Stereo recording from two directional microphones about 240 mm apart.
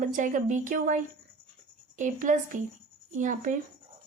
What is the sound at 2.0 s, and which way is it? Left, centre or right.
Speech, right.